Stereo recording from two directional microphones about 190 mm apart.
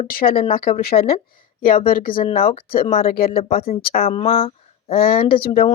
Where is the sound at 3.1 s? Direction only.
50° left (ahead or behind).